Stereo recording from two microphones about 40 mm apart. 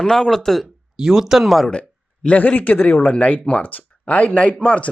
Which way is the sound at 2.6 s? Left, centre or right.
Left.